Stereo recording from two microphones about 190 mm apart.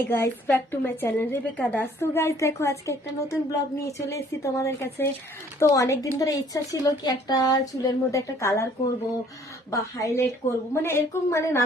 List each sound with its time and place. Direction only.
0.0 s a woman's voice: 10° left (ahead or behind)
9.7 s a woman's voice: 15° left (ahead or behind)